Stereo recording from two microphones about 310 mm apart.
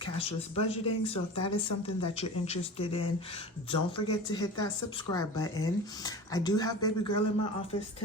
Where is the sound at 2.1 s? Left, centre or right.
Left.